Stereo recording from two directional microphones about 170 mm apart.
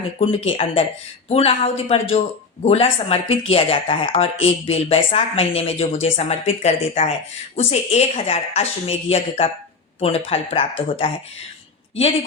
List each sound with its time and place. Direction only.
0.2 s speech: 35° left (ahead or behind)